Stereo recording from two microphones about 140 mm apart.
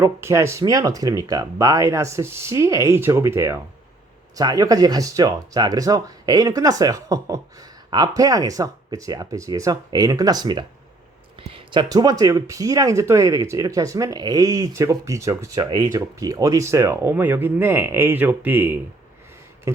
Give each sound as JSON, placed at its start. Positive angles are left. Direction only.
{"t": 0.0, "sound": "speech", "side_deg": -20}